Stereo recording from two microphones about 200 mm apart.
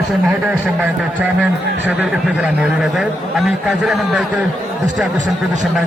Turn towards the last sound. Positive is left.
turn(degrees=0)  # may be behind; listen again after turning